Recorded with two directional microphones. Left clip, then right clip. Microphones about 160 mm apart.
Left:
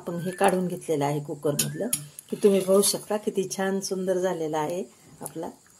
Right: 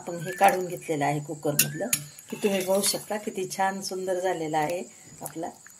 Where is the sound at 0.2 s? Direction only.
65° left (ahead or behind).